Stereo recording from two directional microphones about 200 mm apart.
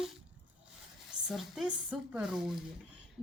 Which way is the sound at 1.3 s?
Centre (ahead or behind).